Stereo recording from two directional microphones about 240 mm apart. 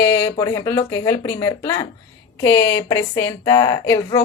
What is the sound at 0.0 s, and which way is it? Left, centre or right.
A woman's voice, centre.